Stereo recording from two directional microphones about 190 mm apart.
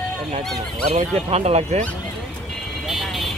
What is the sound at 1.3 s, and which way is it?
Speech, 35° right (ahead or behind).